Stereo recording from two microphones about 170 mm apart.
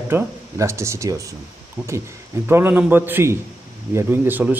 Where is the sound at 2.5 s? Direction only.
10° right (ahead or behind).